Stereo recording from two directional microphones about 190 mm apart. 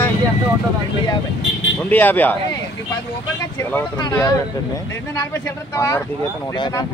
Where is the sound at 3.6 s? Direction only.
15° left (ahead or behind).